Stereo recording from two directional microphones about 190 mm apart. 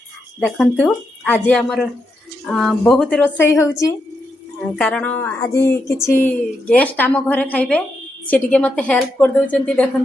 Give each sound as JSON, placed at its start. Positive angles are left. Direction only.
{"t": 0.3, "sound": "speech", "side_deg": 5}